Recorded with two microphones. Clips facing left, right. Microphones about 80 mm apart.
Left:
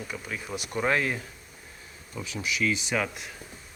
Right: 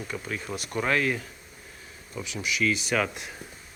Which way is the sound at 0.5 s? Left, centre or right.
Centre.